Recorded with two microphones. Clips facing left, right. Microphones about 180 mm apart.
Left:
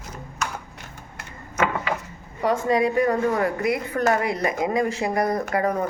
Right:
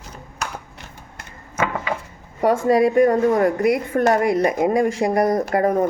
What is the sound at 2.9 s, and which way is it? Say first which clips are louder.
Speech: right 5 dB; 45° right (ahead or behind).